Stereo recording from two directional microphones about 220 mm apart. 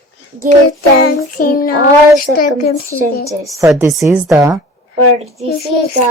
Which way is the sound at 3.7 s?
5° right (ahead or behind).